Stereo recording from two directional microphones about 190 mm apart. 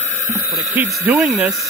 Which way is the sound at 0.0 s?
40° left (ahead or behind).